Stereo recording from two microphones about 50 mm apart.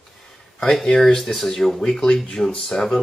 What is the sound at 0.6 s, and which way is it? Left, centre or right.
Speech, centre.